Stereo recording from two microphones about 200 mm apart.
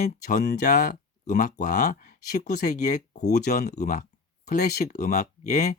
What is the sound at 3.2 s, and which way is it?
Speech, 55° left (ahead or behind).